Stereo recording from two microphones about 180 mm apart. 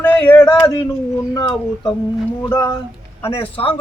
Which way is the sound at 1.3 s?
25° left (ahead or behind).